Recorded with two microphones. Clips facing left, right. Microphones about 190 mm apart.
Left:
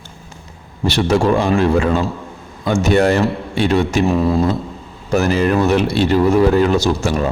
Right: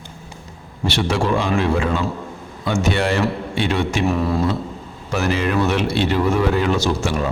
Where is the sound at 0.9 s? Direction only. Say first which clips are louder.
Left 5 dB; 40° left (ahead or behind).